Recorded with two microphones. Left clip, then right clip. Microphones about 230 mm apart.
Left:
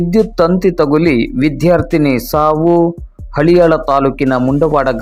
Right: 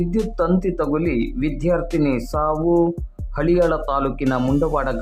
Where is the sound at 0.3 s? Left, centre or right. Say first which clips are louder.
Left 8 dB; left.